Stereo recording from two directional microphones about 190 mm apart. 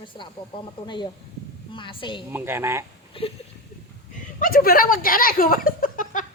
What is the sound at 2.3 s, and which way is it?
Speech, 10° right (ahead or behind).